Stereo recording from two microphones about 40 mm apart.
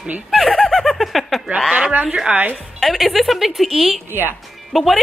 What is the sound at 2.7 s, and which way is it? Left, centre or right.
A woman's voice, centre.